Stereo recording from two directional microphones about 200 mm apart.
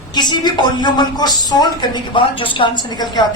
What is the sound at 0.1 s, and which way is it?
A man's voice, 20° left (ahead or behind).